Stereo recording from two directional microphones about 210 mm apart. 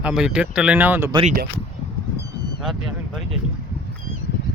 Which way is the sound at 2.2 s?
50° left (ahead or behind).